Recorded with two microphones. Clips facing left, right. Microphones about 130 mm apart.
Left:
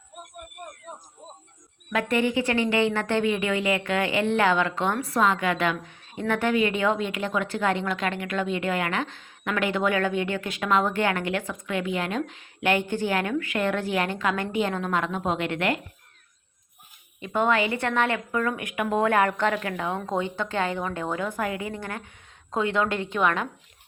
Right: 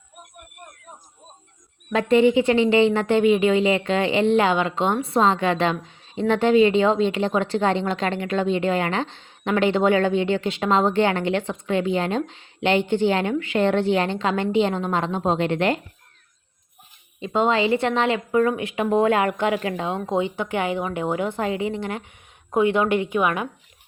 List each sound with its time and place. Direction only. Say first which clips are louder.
1.9 s a woman's voice: right 7 dB; 25° right (ahead or behind)
17.2 s a woman's voice: right 3 dB; 20° right (ahead or behind)